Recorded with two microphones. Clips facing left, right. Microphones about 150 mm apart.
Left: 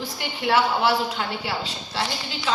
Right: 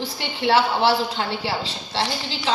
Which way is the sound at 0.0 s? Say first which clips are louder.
Right 3 dB; 30° right (ahead or behind).